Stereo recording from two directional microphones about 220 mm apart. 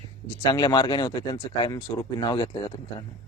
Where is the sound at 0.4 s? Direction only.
20° left (ahead or behind).